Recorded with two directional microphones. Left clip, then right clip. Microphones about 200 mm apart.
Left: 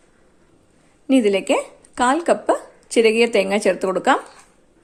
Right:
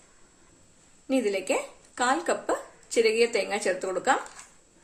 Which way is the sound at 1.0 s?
40° left (ahead or behind).